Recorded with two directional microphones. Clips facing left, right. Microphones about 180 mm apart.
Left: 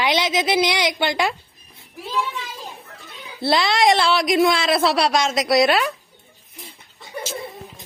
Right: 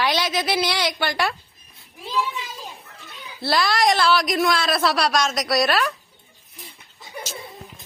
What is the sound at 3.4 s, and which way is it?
A woman's voice, 25° left (ahead or behind).